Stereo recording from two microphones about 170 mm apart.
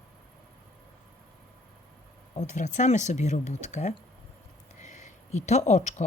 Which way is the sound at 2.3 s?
45° left (ahead or behind).